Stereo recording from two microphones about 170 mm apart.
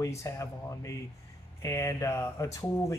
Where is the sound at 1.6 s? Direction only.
20° left (ahead or behind).